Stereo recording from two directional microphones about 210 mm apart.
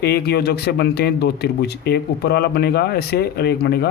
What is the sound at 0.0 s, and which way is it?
Speech, 50° left (ahead or behind).